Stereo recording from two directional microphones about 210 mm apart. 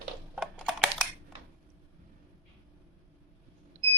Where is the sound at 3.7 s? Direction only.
35° right (ahead or behind).